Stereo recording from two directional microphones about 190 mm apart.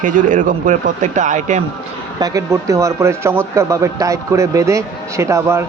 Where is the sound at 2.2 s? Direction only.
15° right (ahead or behind).